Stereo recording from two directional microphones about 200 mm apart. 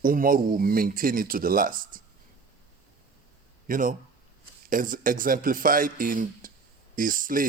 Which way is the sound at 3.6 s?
40° right (ahead or behind).